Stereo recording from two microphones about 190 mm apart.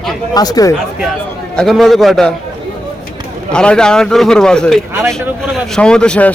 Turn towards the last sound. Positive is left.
turn(degrees=5)  # may be behind; listen again after turning